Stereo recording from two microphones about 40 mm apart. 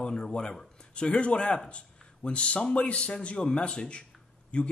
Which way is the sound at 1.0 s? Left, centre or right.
Left.